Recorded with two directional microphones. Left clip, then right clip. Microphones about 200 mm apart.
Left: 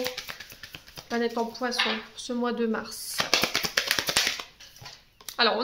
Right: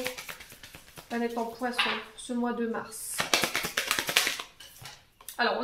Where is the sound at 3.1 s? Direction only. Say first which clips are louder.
Left 2 dB; 35° left (ahead or behind).